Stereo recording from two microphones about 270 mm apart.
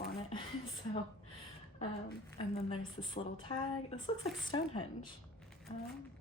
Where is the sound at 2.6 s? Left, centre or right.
Left.